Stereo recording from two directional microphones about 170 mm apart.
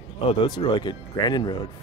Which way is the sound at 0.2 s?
30° left (ahead or behind).